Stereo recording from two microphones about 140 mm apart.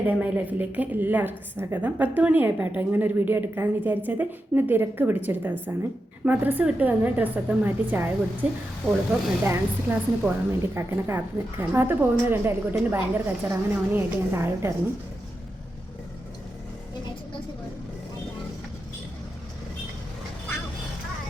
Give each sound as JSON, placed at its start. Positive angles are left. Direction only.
{"t": 0.0, "sound": "a woman's voice", "side_deg": -10}